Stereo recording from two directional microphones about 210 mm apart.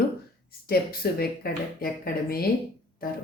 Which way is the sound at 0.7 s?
45° left (ahead or behind).